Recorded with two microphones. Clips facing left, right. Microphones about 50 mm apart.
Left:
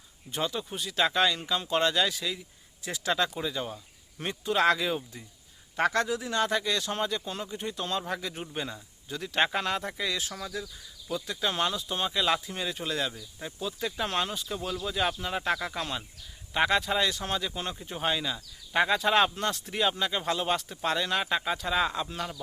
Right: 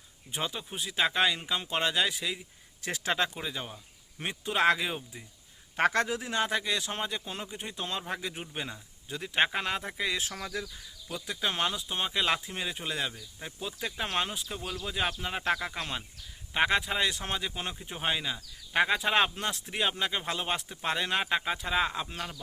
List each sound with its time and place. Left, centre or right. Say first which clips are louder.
0.3 s speech: left 3 dB; centre
2.8 s a man's voice: left 1 dB; right
3.2 s speech: left 4 dB; centre
5.7 s a man's voice: even; right
6.3 s speech: left 2 dB; centre; by 10.7 s right
11.1 s speech: left 2 dB; centre